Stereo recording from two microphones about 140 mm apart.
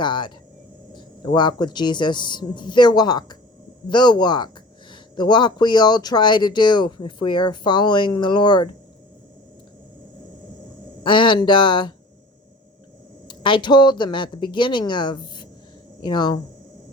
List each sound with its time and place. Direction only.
0.0 s speech: 35° left (ahead or behind)
11.0 s speech: 35° left (ahead or behind)
13.2 s speech: 35° left (ahead or behind)